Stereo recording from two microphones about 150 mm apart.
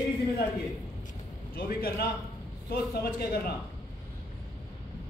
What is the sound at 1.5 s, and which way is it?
A man's voice, 90° left.